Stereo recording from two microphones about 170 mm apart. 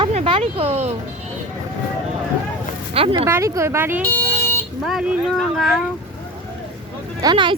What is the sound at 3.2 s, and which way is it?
Speech, 15° right (ahead or behind).